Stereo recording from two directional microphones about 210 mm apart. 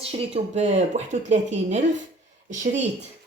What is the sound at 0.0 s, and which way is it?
Speech, 30° right (ahead or behind).